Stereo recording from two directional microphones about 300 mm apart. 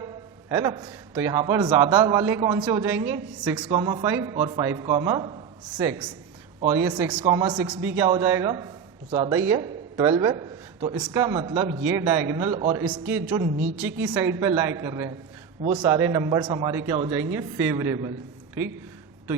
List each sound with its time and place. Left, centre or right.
0.0 s a man's voice: centre
13.7 s a woman's voice: centre